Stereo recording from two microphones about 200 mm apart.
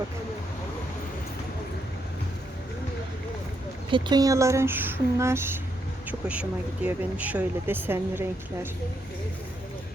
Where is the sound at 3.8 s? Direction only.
25° right (ahead or behind).